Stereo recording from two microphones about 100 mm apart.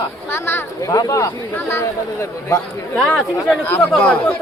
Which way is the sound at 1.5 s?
25° left (ahead or behind).